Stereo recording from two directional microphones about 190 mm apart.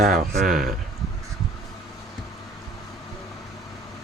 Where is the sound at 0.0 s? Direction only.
50° right (ahead or behind).